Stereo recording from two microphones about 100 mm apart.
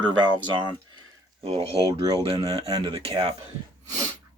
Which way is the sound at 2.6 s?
60° right (ahead or behind).